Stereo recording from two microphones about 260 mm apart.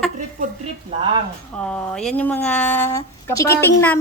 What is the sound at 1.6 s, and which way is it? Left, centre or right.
Speech, centre.